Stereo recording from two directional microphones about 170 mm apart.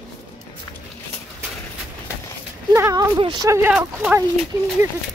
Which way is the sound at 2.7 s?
15° right (ahead or behind).